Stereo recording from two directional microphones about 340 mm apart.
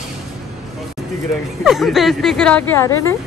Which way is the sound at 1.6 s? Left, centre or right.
Centre.